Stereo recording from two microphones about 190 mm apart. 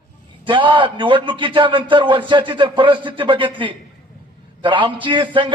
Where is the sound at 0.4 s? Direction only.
25° right (ahead or behind).